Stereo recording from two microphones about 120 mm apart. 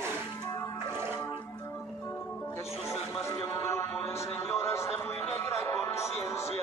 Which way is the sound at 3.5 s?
25° left (ahead or behind).